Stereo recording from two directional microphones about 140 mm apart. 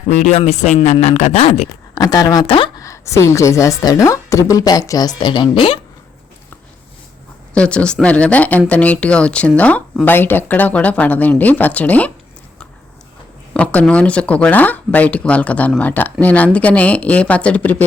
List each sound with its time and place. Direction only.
0.2 s speech: 55° left (ahead or behind)
2.0 s a woman's voice: 25° left (ahead or behind)
2.7 s a woman's voice: 20° left (ahead or behind); by 5.8 s 40° left (ahead or behind)
7.5 s speech: 10° left (ahead or behind)
13.5 s speech: 10° left (ahead or behind)